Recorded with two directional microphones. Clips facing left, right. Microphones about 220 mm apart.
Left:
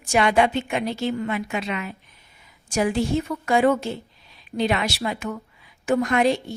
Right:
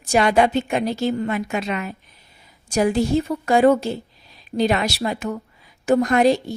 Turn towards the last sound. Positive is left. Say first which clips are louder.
# right 4 dB
turn(degrees=-40)  # may be behind; listen again after turning